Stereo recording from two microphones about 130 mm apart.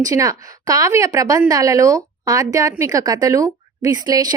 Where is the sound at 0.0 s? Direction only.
25° right (ahead or behind).